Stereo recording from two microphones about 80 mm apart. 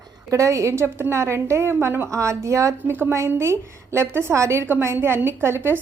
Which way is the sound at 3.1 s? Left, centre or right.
Right.